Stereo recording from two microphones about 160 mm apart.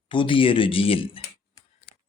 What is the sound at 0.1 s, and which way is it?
Speech, 30° left (ahead or behind).